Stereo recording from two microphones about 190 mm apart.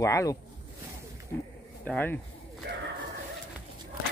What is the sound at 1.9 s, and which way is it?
Speech, 10° left (ahead or behind).